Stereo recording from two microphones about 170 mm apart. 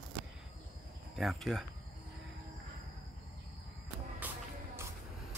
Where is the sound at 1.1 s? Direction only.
Centre (ahead or behind).